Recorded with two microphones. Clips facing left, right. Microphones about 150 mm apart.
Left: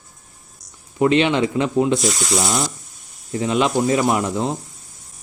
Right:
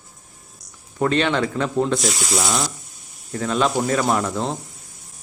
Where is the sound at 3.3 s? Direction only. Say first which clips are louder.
Left 2 dB; 15° left (ahead or behind).